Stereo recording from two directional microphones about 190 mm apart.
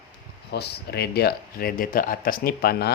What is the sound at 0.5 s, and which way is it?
Speech, 60° left (ahead or behind).